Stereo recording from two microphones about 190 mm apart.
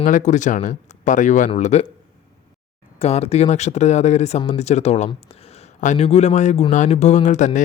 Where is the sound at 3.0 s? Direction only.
35° left (ahead or behind).